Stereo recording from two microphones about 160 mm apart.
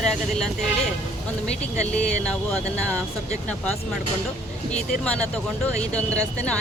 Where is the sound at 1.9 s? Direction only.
5° left (ahead or behind).